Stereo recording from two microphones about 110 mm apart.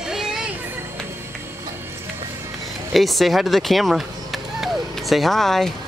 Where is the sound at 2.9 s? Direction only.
Centre (ahead or behind).